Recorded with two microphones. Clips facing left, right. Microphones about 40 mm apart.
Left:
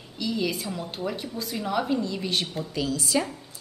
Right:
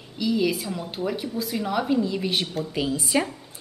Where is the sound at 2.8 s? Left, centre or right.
Right.